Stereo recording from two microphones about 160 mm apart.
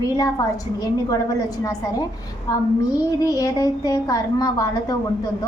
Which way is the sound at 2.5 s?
20° left (ahead or behind).